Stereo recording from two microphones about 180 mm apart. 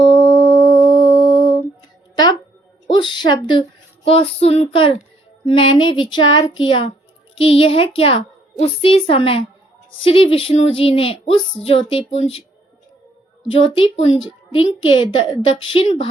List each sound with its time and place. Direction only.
0.0 s mantra: 25° left (ahead or behind)
2.9 s a child's voice: 25° left (ahead or behind)
13.5 s a child's voice: 30° left (ahead or behind)